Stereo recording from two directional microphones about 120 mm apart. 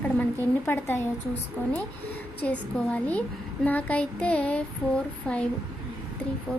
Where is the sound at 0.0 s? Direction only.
15° left (ahead or behind).